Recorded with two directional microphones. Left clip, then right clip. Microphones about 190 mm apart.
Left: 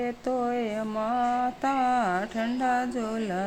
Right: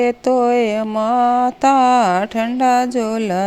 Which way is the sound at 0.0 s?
35° right (ahead or behind).